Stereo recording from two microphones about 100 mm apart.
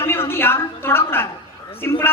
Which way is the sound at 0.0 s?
25° left (ahead or behind).